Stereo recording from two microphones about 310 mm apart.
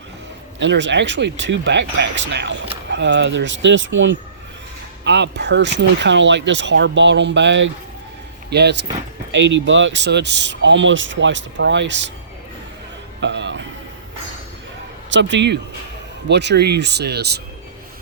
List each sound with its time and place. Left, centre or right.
0.6 s speech: right
13.1 s music: right
15.1 s speech: right